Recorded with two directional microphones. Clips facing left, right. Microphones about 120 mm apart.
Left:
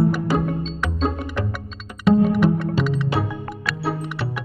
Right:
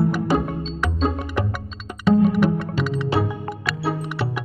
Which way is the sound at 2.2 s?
Centre (ahead or behind).